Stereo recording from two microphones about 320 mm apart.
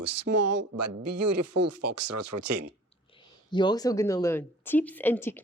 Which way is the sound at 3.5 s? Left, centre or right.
Centre.